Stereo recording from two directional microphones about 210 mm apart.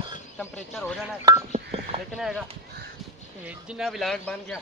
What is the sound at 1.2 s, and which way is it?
Speech, 20° right (ahead or behind).